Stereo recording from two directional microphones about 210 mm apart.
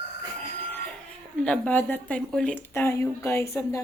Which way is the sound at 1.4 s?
5° left (ahead or behind).